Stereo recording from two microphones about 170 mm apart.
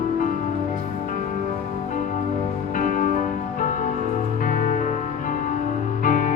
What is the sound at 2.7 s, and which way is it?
Music, 50° left (ahead or behind).